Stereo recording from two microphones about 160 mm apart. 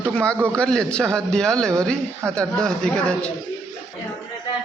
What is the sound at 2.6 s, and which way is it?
Speech, 5° left (ahead or behind).